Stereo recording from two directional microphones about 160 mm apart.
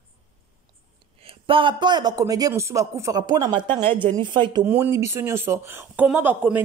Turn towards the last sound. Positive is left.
turn(degrees=-10)  # may be behind; listen again after turning